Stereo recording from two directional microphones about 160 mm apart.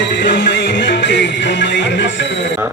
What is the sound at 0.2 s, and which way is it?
Music, 90° left.